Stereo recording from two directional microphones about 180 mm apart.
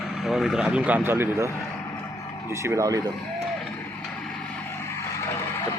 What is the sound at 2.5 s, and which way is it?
Speech, 15° right (ahead or behind).